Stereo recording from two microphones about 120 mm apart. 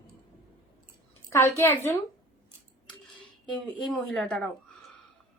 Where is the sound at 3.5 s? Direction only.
5° left (ahead or behind).